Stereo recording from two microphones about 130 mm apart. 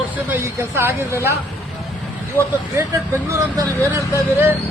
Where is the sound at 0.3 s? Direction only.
20° right (ahead or behind).